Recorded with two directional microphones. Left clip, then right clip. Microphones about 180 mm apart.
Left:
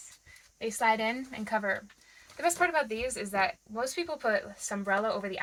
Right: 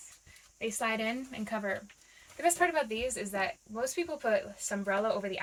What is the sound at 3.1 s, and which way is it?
Speech, 25° left (ahead or behind).